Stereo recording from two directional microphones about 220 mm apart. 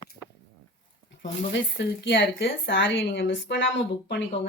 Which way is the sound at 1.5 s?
55° left (ahead or behind).